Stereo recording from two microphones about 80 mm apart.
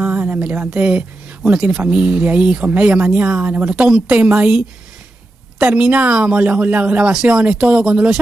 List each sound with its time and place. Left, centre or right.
0.1 s a sound: right
0.4 s speech: centre
5.7 s speech: centre